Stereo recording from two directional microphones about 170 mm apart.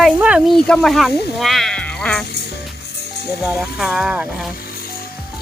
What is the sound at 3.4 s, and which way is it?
Speech, 5° right (ahead or behind).